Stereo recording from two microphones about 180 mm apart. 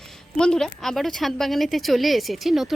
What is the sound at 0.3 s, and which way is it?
A woman's voice, 5° left (ahead or behind).